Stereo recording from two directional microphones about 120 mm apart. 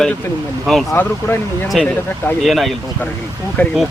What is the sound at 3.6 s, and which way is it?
Speech, 15° left (ahead or behind).